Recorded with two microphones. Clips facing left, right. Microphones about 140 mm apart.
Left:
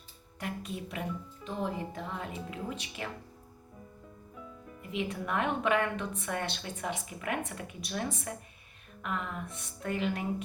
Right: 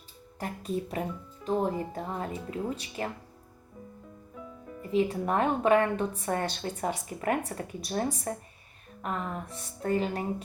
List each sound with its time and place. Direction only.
0.3 s speech: 35° right (ahead or behind)
4.8 s speech: 35° right (ahead or behind)